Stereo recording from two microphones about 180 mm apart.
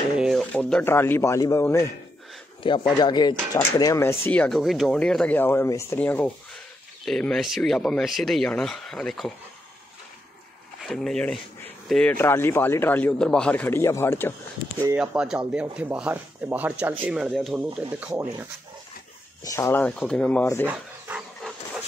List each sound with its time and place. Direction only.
0.2 s speech: centre (ahead or behind); by 1.9 s 15° left (ahead or behind)
2.6 s speech: 30° left (ahead or behind)
4.3 s speech: 5° left (ahead or behind)
10.9 s speech: 5° left (ahead or behind)
15.0 s speech: 5° right (ahead or behind)
19.4 s speech: 15° left (ahead or behind)
20.6 s dog: 10° right (ahead or behind)